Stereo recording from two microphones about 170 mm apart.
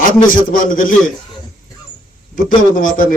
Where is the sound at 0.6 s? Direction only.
50° left (ahead or behind).